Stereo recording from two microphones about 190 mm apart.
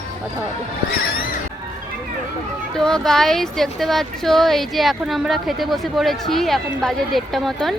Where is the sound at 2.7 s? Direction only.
5° left (ahead or behind).